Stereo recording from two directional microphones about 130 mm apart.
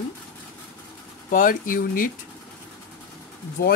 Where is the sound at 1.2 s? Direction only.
90° left.